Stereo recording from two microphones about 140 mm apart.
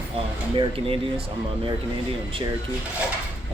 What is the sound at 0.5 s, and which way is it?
Speech, 35° right (ahead or behind).